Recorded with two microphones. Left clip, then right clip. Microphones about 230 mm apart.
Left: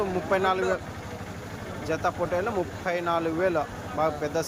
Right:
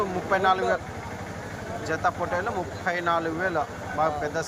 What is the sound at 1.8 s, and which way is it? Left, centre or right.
Speech, left.